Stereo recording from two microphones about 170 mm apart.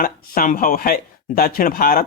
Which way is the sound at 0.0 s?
55° left (ahead or behind).